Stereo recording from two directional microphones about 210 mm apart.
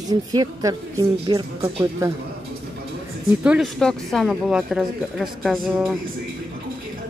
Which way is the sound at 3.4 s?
Centre (ahead or behind).